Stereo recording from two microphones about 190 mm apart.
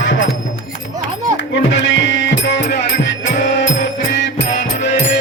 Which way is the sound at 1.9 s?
75° left (ahead or behind).